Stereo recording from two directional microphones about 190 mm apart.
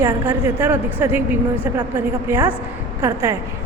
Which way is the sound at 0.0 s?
10° right (ahead or behind).